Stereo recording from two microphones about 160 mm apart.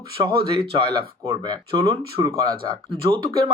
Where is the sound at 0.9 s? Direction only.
25° right (ahead or behind).